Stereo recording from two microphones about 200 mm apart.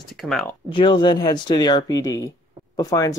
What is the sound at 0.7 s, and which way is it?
Speech, 25° left (ahead or behind).